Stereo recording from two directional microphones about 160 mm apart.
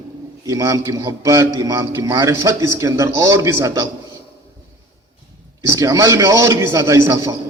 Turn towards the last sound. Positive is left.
turn(degrees=-20)  # may be behind; listen again after turning